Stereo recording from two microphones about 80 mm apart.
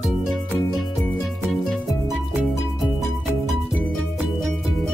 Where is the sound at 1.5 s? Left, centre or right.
Centre.